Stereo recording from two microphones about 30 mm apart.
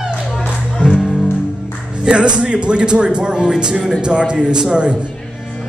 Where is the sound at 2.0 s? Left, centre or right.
Right.